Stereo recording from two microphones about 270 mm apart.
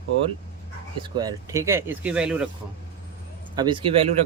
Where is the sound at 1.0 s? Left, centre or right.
Centre.